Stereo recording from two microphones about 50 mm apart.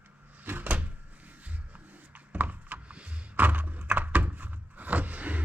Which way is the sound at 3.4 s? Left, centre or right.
Right.